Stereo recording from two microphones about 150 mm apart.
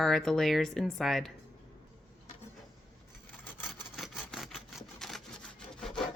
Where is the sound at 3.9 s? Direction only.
Centre (ahead or behind).